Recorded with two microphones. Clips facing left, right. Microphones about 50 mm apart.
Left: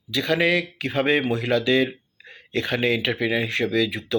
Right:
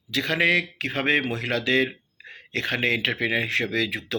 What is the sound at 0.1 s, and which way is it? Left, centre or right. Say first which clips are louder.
Speech: left 1 dB; right.